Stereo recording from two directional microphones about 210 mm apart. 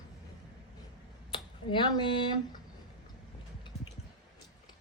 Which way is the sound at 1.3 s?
25° left (ahead or behind).